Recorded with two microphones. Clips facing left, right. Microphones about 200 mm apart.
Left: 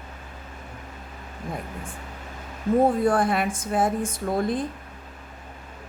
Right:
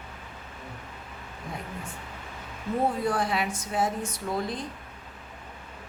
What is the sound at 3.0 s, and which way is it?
A woman's voice, 50° left (ahead or behind).